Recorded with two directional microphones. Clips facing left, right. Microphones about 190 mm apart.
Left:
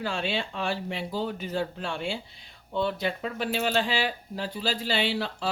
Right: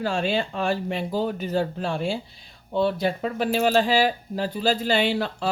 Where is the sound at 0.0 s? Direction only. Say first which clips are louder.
Right 6 dB; 45° right (ahead or behind).